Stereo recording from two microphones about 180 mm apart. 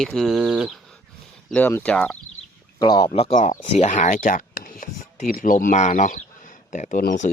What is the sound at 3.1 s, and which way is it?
Speech, 35° left (ahead or behind).